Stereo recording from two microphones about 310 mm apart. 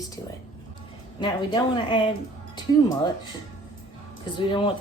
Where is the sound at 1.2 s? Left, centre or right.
Centre.